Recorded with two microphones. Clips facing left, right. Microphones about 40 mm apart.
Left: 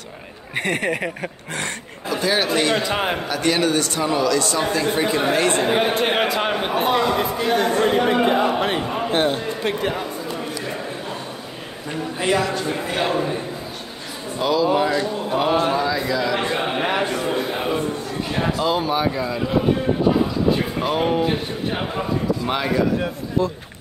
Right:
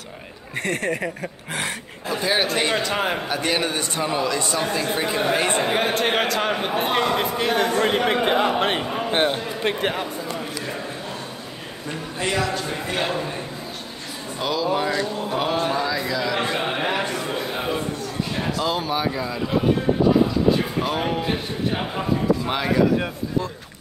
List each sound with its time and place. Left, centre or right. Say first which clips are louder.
0.7 s a man's voice: left 2 dB; centre
2.2 s a man's voice: left 2 dB; centre
2.8 s a man's voice: left 1 dB; centre
3.3 s a man's voice: left 3 dB; centre
4.6 s a man's voice: left 3 dB; centre
6.9 s a man's voice: left 2 dB; right
9.1 s speech: left 1 dB; right
11.9 s a man's voice: left 4 dB; centre
14.4 s a man's voice: left 4 dB; centre
16.9 s a sound: left 3 dB; left
17.2 s a sound: left 4 dB; centre
18.3 s speech: left 5 dB; centre
18.6 s a man's voice: left 3 dB; centre
20.8 s a man's voice: left 4 dB; centre